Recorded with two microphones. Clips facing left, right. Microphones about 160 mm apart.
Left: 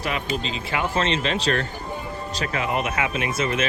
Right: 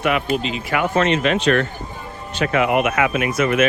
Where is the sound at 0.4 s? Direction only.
30° left (ahead or behind).